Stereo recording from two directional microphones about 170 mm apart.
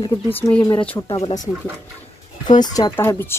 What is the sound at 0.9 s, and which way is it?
Speech, 30° left (ahead or behind).